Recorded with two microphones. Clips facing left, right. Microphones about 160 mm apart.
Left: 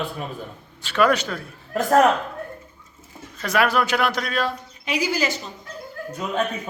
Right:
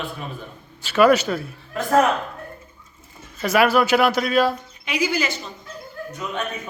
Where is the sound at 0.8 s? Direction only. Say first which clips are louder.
Right 4 dB; 5° right (ahead or behind).